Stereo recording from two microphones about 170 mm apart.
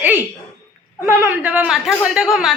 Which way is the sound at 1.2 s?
10° right (ahead or behind).